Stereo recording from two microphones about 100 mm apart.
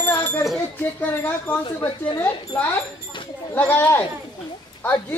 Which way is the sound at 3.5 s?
20° left (ahead or behind).